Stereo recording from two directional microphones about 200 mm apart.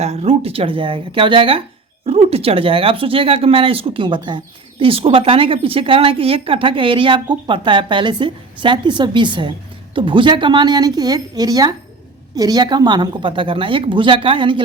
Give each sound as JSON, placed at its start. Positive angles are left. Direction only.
{"t": 0.0, "sound": "speech", "side_deg": -30}